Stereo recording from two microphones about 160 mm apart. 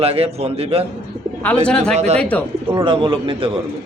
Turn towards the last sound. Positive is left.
turn(degrees=-35)  # may be behind; listen again after turning